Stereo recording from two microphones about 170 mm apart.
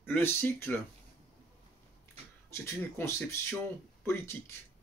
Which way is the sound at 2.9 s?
15° left (ahead or behind).